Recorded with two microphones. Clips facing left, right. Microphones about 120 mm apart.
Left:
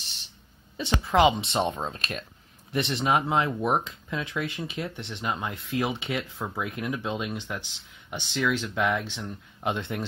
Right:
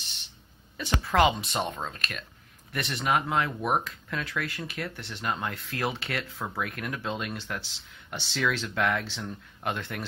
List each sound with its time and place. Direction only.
0.7 s speech: 25° left (ahead or behind)